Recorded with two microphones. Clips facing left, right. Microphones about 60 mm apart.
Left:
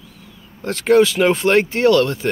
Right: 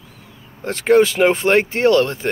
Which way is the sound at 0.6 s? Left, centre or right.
Right.